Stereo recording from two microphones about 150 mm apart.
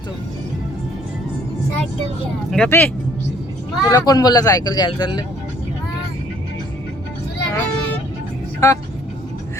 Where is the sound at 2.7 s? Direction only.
15° left (ahead or behind).